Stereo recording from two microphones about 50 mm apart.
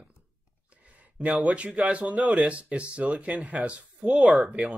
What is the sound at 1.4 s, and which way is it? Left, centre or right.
Speech, right.